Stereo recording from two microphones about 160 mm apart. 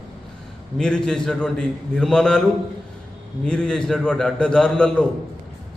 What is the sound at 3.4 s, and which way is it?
A man's voice, 5° left (ahead or behind).